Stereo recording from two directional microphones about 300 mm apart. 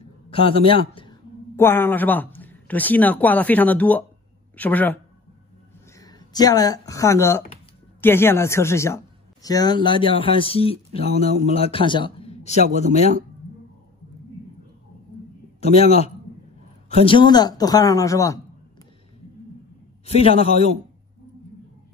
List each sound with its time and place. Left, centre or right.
0.3 s a man's voice: centre
15.6 s a man's voice: left
20.1 s a man's voice: centre